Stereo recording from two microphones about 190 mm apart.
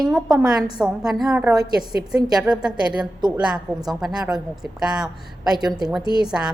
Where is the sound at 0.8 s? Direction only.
Centre (ahead or behind).